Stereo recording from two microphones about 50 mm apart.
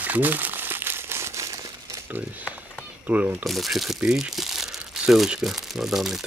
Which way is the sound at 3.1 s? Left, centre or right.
Right.